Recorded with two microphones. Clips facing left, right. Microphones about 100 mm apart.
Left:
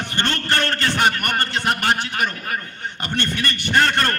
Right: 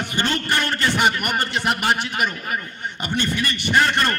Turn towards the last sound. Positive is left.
turn(degrees=-5)  # may be behind; listen again after turning